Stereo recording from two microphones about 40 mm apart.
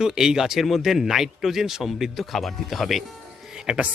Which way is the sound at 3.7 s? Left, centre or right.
Right.